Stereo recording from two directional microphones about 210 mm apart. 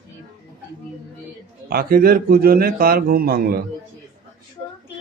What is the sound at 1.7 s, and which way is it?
A man's voice, 45° right (ahead or behind).